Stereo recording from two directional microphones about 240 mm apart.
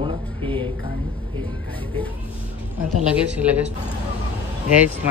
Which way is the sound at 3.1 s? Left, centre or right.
Centre.